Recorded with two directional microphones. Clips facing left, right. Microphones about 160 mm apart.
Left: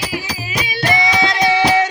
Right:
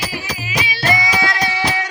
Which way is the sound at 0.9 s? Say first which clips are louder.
Left 3 dB; 25° left (ahead or behind).